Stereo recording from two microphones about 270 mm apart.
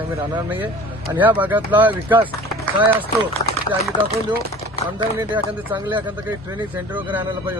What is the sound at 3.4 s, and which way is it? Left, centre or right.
Speech, left.